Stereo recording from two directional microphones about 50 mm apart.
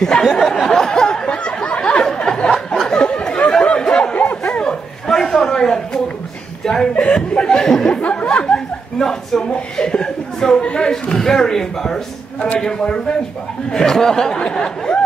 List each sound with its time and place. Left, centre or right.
0.0 s a sound: centre
2.9 s chatter: left
4.4 s dog: centre
5.0 s a sound: centre
6.6 s chuckle: centre
8.0 s chuckle: left
9.0 s a sound: centre
9.5 s chuckle: centre
12.5 s speech: centre